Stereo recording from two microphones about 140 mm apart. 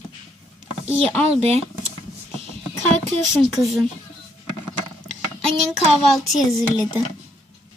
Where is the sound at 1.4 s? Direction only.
45° right (ahead or behind).